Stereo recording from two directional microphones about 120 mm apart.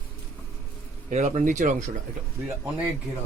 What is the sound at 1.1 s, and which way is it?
Speech, 75° right (ahead or behind).